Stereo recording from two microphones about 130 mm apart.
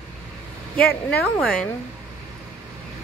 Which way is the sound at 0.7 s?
10° left (ahead or behind).